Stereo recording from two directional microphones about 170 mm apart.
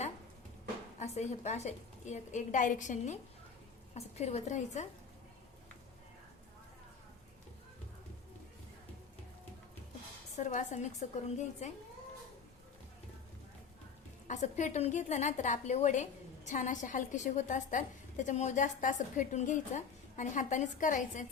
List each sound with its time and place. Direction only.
0.9 s a woman's voice: 40° left (ahead or behind)
10.3 s a woman's voice: 45° left (ahead or behind)
14.3 s a woman's voice: 45° left (ahead or behind)